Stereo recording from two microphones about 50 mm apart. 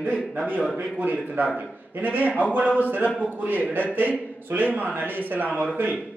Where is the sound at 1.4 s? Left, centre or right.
Right.